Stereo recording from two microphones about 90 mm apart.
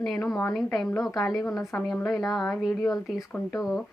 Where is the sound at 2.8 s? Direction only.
45° left (ahead or behind).